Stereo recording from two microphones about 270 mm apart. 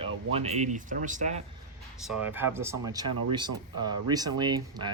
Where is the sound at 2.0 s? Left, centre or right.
Centre.